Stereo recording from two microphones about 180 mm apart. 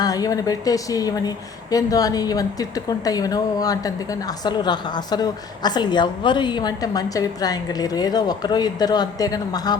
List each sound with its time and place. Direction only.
0.0 s a woman's voice: 20° left (ahead or behind)